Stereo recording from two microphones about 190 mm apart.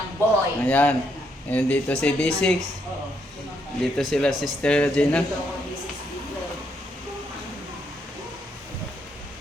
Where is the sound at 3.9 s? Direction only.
5° left (ahead or behind).